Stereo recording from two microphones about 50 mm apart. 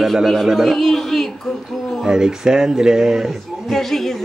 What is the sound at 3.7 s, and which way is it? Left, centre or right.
Speech, centre.